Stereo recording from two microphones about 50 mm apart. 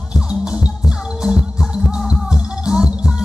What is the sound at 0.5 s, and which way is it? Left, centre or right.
Music, centre.